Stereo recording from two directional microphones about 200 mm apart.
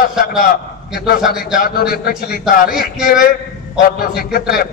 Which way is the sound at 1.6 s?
50° left (ahead or behind).